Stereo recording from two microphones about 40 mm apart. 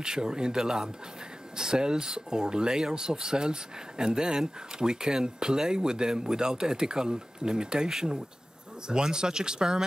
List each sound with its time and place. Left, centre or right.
0.0 s speech: centre